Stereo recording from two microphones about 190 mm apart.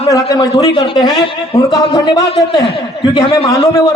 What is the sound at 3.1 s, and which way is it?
Speech, 25° left (ahead or behind).